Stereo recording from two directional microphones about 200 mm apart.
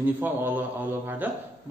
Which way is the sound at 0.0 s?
10° right (ahead or behind).